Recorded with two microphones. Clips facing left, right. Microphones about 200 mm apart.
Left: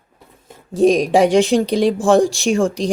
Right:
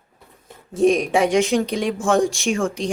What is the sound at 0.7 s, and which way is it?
Speech, 35° left (ahead or behind).